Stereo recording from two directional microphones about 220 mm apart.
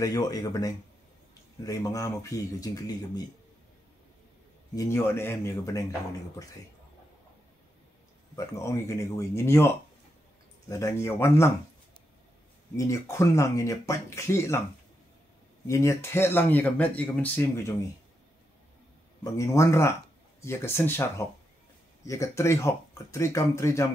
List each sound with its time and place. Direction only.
0.0 s speech: 15° left (ahead or behind)
4.7 s speech: 10° left (ahead or behind)
8.4 s speech: 15° left (ahead or behind)
10.7 s speech: 15° left (ahead or behind)
12.7 s speech: 15° left (ahead or behind)
15.6 s speech: 15° left (ahead or behind)
19.3 s speech: 15° left (ahead or behind)